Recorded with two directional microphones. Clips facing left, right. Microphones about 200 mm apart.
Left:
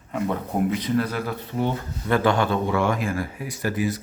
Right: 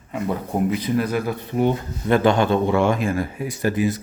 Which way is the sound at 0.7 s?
10° right (ahead or behind).